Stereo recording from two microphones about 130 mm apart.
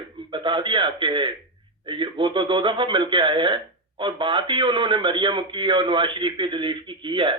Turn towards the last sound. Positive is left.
turn(degrees=-40)  # may be behind; listen again after turning